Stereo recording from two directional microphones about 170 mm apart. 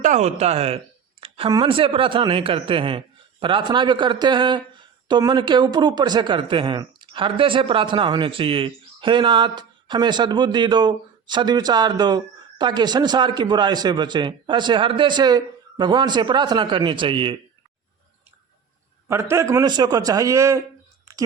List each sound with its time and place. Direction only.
0.0 s a man's voice: 45° right (ahead or behind)
19.0 s a man's voice: 15° right (ahead or behind)